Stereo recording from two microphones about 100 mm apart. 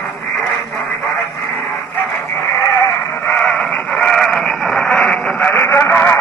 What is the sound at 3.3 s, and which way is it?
Radio, 10° left (ahead or behind).